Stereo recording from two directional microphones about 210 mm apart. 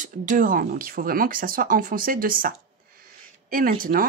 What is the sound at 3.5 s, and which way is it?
Speech, 40° right (ahead or behind).